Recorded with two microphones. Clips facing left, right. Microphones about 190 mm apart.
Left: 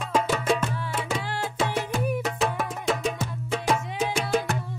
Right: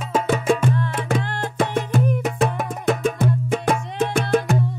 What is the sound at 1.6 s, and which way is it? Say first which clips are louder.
Music: right 6 dB; 55° right (ahead or behind).